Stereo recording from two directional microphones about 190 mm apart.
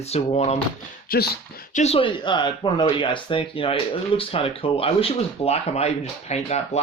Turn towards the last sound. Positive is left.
turn(degrees=35)  # may be behind; listen again after turning